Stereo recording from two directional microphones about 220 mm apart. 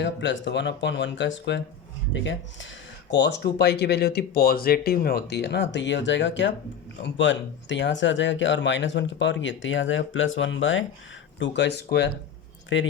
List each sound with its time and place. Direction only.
0.0 s speech: 55° left (ahead or behind)